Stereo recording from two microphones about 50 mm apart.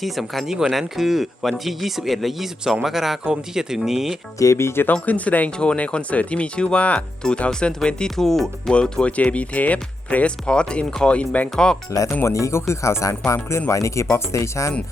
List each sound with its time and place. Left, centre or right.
0.0 s speech: centre
4.4 s speech: left
5.0 s speech: left
7.8 s speech: centre
8.7 s speech: left
11.5 s speech: centre
12.2 s speech: left